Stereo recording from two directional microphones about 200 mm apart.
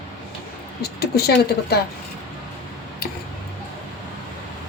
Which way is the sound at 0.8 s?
55° left (ahead or behind).